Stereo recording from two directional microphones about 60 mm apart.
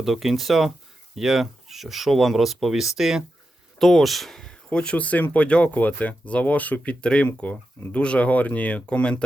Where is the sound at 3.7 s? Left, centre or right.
Centre.